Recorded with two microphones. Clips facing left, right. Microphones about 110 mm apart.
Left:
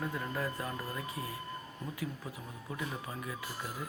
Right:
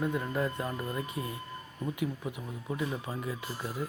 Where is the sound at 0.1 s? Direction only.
25° right (ahead or behind).